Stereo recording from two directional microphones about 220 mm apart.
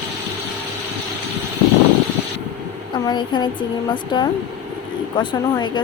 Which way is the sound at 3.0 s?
20° left (ahead or behind).